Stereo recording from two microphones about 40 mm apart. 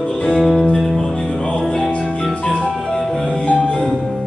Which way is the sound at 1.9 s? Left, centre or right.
Left.